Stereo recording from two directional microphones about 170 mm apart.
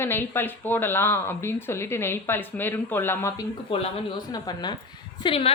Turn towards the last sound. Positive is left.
turn(degrees=35)  # may be behind; listen again after turning